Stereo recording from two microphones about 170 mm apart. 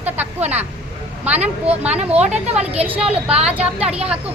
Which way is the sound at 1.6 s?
10° right (ahead or behind).